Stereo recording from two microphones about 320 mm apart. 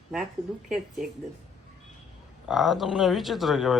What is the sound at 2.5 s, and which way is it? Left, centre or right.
Speech, centre.